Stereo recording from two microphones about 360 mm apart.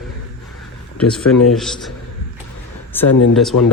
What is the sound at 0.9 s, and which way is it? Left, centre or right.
Speech, centre.